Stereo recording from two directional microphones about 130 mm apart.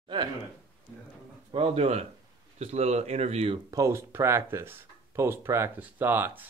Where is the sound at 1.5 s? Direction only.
50° right (ahead or behind).